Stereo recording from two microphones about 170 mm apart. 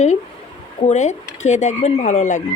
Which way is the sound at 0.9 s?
45° left (ahead or behind).